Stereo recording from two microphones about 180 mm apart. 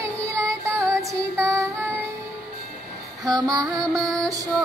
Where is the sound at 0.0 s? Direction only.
15° right (ahead or behind).